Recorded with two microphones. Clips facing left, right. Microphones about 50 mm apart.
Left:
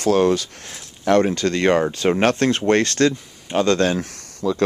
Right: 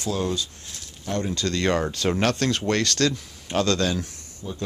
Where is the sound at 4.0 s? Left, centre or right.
Left.